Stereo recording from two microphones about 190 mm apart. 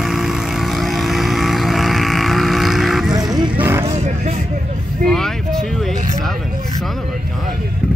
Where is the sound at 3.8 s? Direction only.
40° right (ahead or behind).